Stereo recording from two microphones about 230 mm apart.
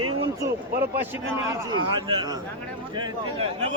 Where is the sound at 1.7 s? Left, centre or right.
Centre.